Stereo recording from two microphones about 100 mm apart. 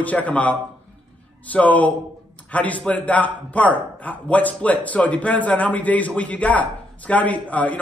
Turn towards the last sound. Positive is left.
turn(degrees=15)  # may be behind; listen again after turning